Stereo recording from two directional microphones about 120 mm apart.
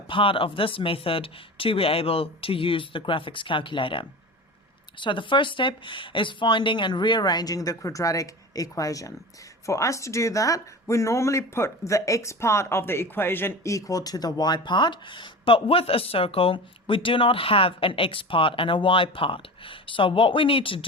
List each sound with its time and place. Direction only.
0.1 s a woman's voice: 45° left (ahead or behind)